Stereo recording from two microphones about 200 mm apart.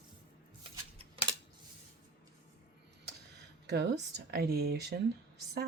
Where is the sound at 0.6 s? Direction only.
30° right (ahead or behind).